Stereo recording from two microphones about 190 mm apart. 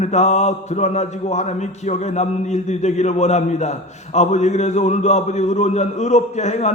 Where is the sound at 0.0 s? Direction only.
35° left (ahead or behind).